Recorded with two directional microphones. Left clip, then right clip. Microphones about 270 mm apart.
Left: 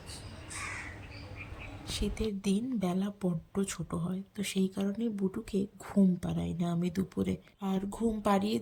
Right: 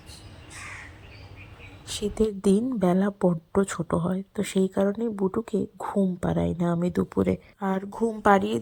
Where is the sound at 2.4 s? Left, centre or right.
Right.